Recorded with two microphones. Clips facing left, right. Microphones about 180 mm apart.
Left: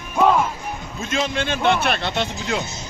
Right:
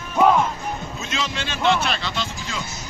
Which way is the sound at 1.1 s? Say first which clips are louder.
Left 7 dB; 50° left (ahead or behind).